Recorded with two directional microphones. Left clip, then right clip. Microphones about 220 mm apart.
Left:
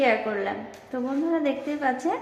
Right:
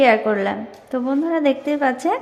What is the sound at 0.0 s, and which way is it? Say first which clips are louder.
A woman's voice: right 8 dB; 45° right (ahead or behind).